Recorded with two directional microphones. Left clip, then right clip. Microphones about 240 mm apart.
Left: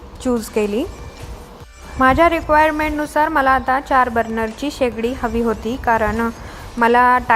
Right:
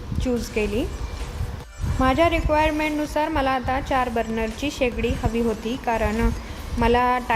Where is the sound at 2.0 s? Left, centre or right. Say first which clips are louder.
Left 6 dB; centre.